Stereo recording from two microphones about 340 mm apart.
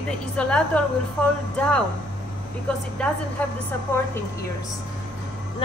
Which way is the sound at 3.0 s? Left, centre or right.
Centre.